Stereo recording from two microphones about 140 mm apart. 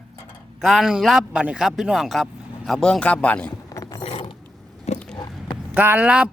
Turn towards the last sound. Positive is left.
turn(degrees=-10)  # may be behind; listen again after turning